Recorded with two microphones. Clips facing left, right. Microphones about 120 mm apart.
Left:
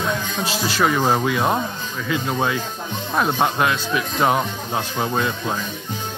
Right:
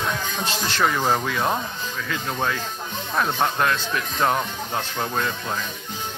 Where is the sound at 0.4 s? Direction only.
5° left (ahead or behind).